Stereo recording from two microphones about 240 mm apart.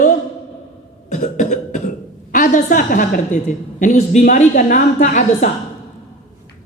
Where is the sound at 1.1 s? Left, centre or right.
Left.